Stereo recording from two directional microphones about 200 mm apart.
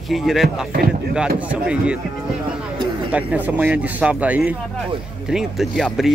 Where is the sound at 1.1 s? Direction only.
5° right (ahead or behind).